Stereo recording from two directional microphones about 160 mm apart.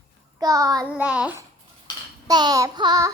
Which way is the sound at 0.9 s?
5° right (ahead or behind).